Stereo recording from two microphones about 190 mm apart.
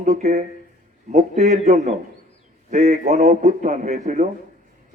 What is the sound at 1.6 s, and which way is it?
A man's voice, 35° right (ahead or behind).